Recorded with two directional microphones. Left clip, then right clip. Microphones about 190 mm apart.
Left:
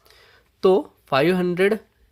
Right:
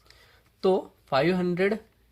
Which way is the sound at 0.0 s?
45° left (ahead or behind).